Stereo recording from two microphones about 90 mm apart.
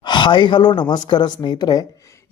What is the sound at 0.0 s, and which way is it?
Speech, 60° left (ahead or behind).